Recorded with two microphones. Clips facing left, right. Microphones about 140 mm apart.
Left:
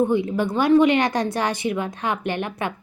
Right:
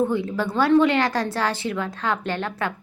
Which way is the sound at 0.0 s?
15° left (ahead or behind).